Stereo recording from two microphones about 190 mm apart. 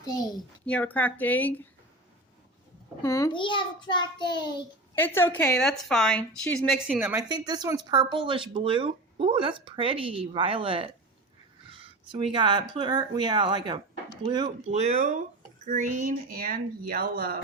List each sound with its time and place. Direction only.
0.0 s a child's voice: 20° left (ahead or behind)
0.6 s speech: 5° left (ahead or behind)
3.0 s a child's voice: 15° left (ahead or behind)
4.9 s a woman's voice: 10° left (ahead or behind)
6.8 s speech: 10° right (ahead or behind)
7.3 s speech: 20° right (ahead or behind); by 17.4 s 50° right (ahead or behind)